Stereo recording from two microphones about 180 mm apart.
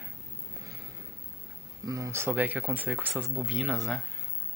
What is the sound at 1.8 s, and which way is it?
Speech, 20° right (ahead or behind).